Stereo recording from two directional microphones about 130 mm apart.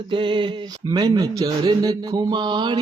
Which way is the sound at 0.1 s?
40° right (ahead or behind).